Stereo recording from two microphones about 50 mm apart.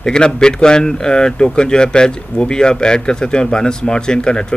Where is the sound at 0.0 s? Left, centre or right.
Centre.